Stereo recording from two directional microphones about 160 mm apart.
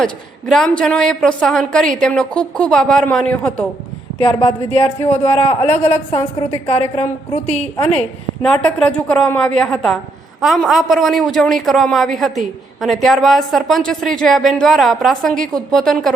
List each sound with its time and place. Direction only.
0.0 s a woman's voice: 5° left (ahead or behind)
4.2 s a woman's voice: 35° left (ahead or behind)
8.4 s a woman's voice: 5° left (ahead or behind)